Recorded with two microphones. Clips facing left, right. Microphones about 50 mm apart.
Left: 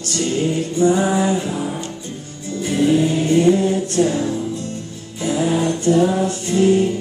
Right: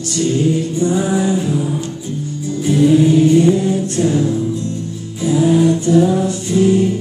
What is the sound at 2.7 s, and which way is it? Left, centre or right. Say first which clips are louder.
Music: right 5 dB; left.